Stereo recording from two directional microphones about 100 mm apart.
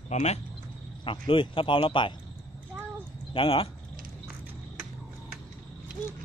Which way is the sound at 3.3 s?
60° left (ahead or behind).